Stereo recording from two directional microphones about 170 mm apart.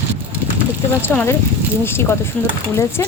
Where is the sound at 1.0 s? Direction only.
10° left (ahead or behind).